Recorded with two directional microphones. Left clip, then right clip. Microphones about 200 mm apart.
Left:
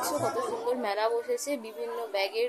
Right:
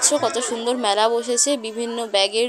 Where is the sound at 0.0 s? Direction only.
35° right (ahead or behind).